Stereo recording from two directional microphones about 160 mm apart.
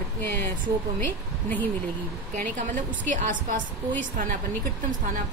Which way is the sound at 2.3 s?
50° right (ahead or behind).